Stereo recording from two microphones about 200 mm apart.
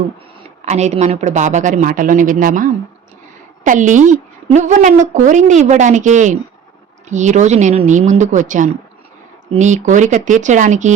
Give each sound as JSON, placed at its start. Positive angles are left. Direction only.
{"t": 0.6, "sound": "speech", "side_deg": -35}